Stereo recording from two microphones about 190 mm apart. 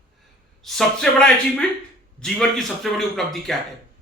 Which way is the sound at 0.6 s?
Centre (ahead or behind).